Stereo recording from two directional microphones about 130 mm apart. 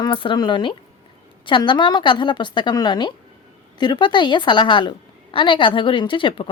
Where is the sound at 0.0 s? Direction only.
40° left (ahead or behind).